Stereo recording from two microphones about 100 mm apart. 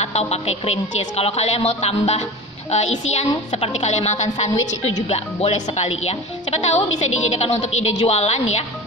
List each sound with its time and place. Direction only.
0.0 s a woman's voice: 90° left